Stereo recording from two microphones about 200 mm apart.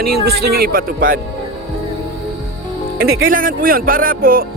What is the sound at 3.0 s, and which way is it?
Speech, 45° right (ahead or behind).